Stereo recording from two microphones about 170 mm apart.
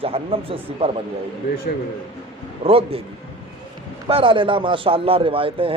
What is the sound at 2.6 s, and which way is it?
Speech, 35° right (ahead or behind).